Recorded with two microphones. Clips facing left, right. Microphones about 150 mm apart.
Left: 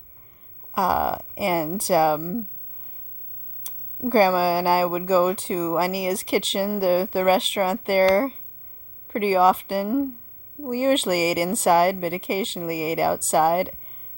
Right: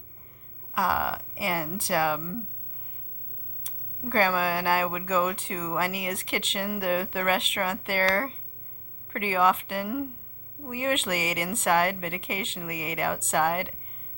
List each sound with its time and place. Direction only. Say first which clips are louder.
0.7 s speech: left 5 dB; 40° left (ahead or behind)
3.6 s speech: left 9 dB; 40° left (ahead or behind)